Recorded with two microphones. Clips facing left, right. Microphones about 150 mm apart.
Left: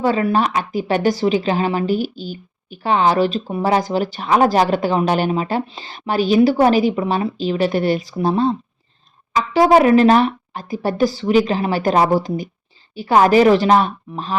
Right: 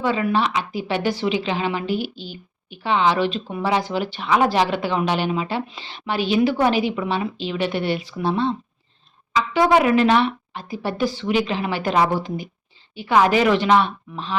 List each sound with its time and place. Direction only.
0.0 s a woman's voice: 40° left (ahead or behind)